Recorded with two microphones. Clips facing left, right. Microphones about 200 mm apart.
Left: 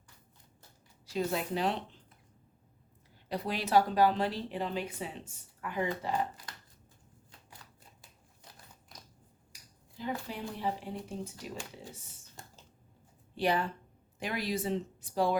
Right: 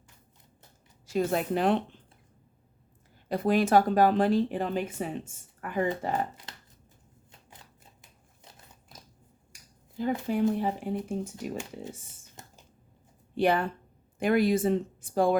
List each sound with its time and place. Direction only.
1.0 s speech: 50° right (ahead or behind)
3.2 s speech: 50° right (ahead or behind)
6.5 s chopping: 25° right (ahead or behind)
10.0 s speech: 50° right (ahead or behind)
12.2 s computer keyboard: 15° right (ahead or behind)
13.3 s speech: 55° right (ahead or behind)